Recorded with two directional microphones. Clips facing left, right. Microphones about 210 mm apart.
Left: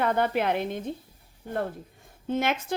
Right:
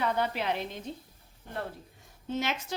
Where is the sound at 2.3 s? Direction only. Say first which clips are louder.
Left 5 dB; 55° left (ahead or behind).